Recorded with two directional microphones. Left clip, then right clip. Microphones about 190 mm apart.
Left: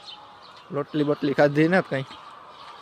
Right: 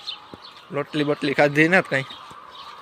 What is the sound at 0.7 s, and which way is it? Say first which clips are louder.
Speech: right 1 dB; 15° left (ahead or behind).